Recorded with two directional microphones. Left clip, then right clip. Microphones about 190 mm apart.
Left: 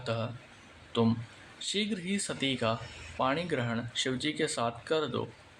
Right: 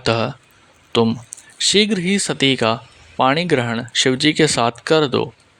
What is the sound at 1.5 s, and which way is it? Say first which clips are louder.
Speech: right 18 dB; 50° right (ahead or behind).